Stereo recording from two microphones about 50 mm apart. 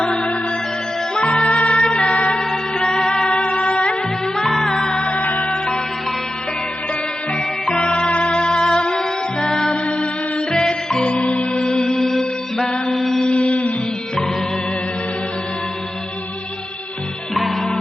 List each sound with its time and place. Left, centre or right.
0.0 s music: centre
2.3 s music: centre
4.4 s music: centre
5.2 s music: left
5.5 s music: centre
7.6 s music: centre
17.3 s music: centre